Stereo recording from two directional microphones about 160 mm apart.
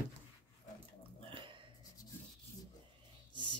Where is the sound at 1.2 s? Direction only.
30° right (ahead or behind).